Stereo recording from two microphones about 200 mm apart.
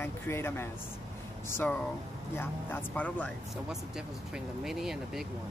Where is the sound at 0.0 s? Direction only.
10° left (ahead or behind).